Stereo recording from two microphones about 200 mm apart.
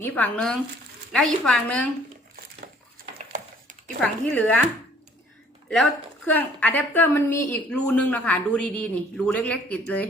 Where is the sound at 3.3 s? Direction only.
40° right (ahead or behind).